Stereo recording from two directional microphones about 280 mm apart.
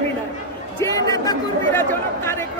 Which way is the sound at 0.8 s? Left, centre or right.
Centre.